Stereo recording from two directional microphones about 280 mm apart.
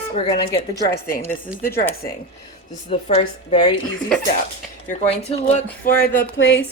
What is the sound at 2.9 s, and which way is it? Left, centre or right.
Speech, left.